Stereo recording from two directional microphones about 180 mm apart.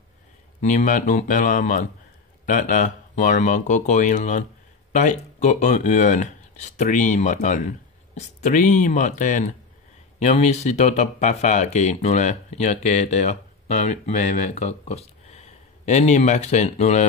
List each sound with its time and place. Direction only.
0.6 s speech: 40° left (ahead or behind)